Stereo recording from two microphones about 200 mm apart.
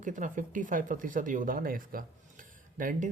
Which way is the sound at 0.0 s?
40° right (ahead or behind).